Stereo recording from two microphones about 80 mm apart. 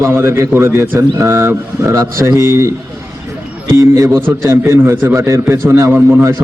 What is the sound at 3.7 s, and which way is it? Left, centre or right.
A man's voice, right.